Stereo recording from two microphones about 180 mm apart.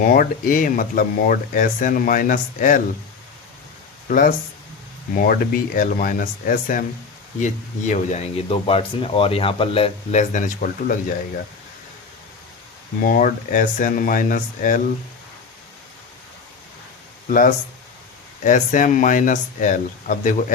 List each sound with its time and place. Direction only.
0.0 s speech: 50° left (ahead or behind)
4.1 s speech: 45° left (ahead or behind)
13.0 s speech: 50° left (ahead or behind)
17.2 s speech: 50° left (ahead or behind)